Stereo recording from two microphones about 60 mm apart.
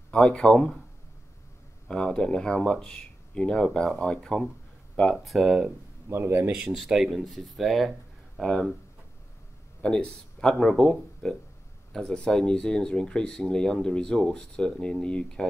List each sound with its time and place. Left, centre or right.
0.1 s speech: centre
1.9 s speech: centre
5.1 s speech: centre
6.0 s a man's voice: right
6.7 s speech: centre
9.8 s speech: centre